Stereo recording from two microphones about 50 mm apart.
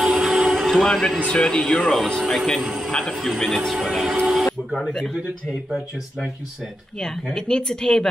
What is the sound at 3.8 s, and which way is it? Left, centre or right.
Music, centre.